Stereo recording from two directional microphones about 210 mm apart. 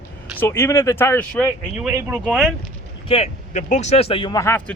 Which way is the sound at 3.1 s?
30° left (ahead or behind).